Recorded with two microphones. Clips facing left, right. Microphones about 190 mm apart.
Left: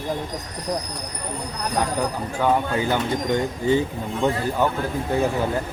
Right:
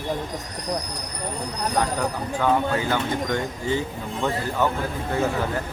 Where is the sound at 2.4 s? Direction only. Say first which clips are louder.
Left 1 dB; 15° left (ahead or behind).